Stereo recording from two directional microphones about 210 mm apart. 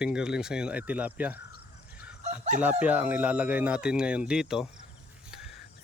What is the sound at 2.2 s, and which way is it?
Speech, 35° right (ahead or behind).